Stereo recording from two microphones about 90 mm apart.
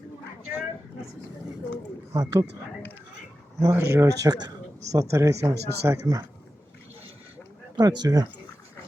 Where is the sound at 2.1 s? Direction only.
40° right (ahead or behind).